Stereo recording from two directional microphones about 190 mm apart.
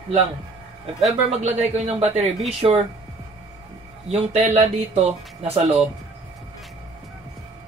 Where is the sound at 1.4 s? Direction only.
35° right (ahead or behind).